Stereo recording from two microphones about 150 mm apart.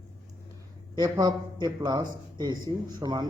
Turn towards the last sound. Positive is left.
turn(degrees=-25)  # may be behind; listen again after turning